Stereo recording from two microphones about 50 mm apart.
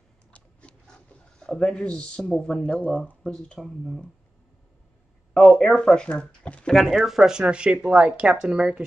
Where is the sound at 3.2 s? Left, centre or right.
Centre.